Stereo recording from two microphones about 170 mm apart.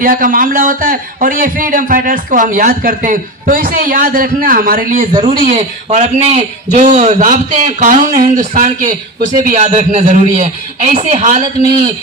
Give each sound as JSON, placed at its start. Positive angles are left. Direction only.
{"t": 0.0, "sound": "a man's voice", "side_deg": -55}
{"t": 5.1, "sound": "speech", "side_deg": -25}
{"t": 5.4, "sound": "a man's voice", "side_deg": -45}